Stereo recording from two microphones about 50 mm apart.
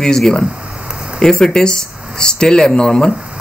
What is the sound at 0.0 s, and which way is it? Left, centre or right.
Speech, centre.